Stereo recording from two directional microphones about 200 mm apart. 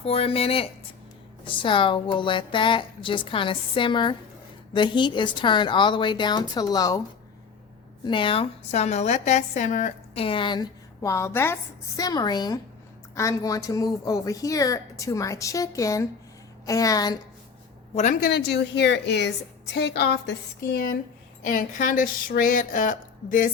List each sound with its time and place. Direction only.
0.0 s a woman's voice: 30° left (ahead or behind)
8.0 s a woman's voice: 25° left (ahead or behind)
10.2 s a woman's voice: 25° left (ahead or behind)
17.9 s a woman's voice: 40° left (ahead or behind); by 20.3 s 55° left (ahead or behind)
21.4 s speech: 40° left (ahead or behind)